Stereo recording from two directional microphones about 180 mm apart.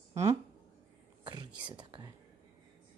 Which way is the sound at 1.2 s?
25° right (ahead or behind).